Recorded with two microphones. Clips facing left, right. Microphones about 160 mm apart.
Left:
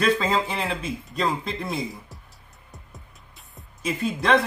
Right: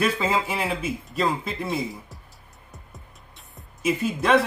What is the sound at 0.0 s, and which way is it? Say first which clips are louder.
Speech: left 1 dB; 10° right (ahead or behind).